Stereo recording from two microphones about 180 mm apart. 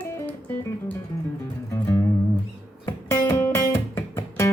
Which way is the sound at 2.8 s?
15° left (ahead or behind).